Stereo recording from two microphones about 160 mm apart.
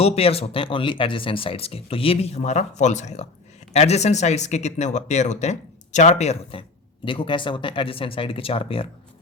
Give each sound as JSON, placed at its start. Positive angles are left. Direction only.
{"t": 0.0, "sound": "speech", "side_deg": 40}